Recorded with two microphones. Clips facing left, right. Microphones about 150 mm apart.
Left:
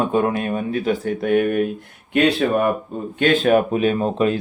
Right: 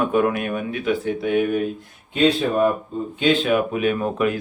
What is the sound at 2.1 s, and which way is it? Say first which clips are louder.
Speech: left 1 dB; 70° left (ahead or behind).